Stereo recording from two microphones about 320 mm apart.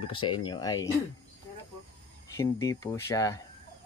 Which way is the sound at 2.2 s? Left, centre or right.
Centre.